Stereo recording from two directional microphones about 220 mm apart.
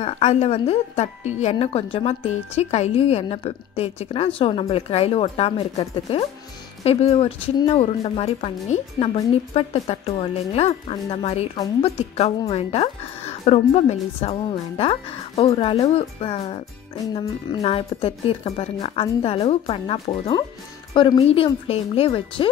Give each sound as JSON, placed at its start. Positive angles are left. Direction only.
{"t": 0.0, "sound": "a woman's voice", "side_deg": 30}